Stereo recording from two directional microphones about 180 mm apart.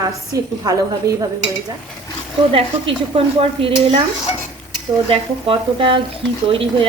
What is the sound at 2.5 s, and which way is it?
A woman's voice, 30° right (ahead or behind).